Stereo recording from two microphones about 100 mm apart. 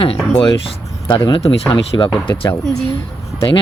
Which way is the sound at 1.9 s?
35° left (ahead or behind).